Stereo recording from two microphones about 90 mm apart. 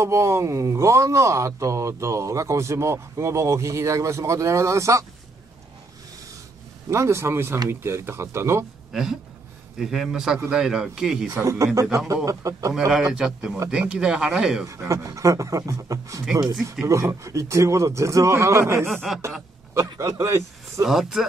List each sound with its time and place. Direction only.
0.0 s speech: 30° right (ahead or behind)
6.9 s speech: 30° right (ahead or behind)
8.9 s a man's voice: 5° right (ahead or behind)
11.3 s speech: 35° right (ahead or behind)
12.7 s a man's voice: 5° right (ahead or behind)
14.9 s speech: 35° right (ahead or behind)
19.1 s a man's voice: 5° right (ahead or behind)
19.7 s speech: 35° right (ahead or behind)
20.8 s a man's voice: 5° right (ahead or behind)